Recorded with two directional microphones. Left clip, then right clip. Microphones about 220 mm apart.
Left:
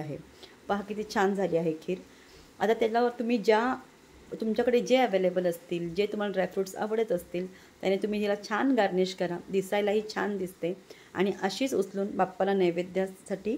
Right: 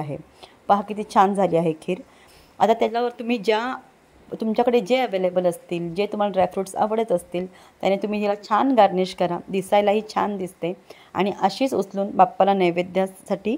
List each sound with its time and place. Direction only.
0.0 s a woman's voice: 25° right (ahead or behind)